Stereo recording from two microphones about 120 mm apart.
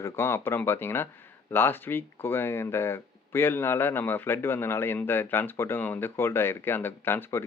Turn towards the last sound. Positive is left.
turn(degrees=20)  # may be behind; listen again after turning